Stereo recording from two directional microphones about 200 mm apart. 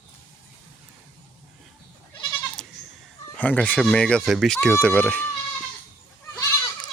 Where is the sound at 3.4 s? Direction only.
5° left (ahead or behind).